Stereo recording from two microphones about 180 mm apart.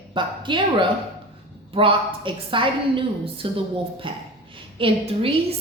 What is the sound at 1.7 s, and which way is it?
A woman's voice, 30° right (ahead or behind).